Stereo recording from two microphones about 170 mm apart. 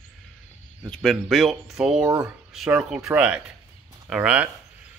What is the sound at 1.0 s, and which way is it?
Speech, centre (ahead or behind).